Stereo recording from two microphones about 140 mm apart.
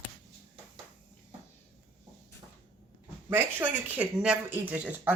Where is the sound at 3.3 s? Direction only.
10° right (ahead or behind).